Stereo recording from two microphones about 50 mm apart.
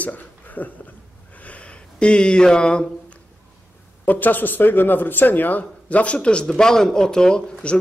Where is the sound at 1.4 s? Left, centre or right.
Left.